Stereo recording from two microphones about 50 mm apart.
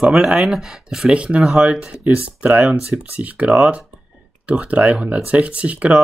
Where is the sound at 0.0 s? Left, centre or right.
Centre.